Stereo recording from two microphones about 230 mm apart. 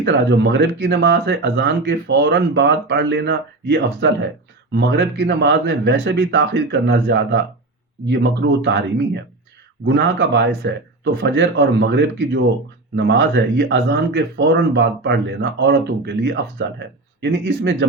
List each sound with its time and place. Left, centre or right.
0.0 s speech: right